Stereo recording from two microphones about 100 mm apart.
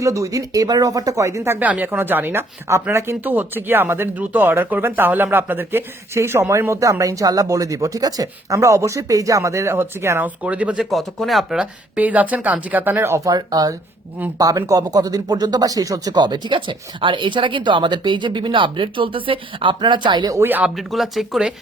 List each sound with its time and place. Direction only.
0.0 s speech: 35° right (ahead or behind)
1.5 s speech: 15° right (ahead or behind)
10.8 s speech: centre (ahead or behind); by 20.3 s 50° right (ahead or behind)
20.3 s speech: 20° right (ahead or behind)
20.7 s speech: centre (ahead or behind)